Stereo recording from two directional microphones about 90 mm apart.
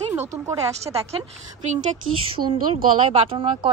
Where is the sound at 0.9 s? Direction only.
40° right (ahead or behind).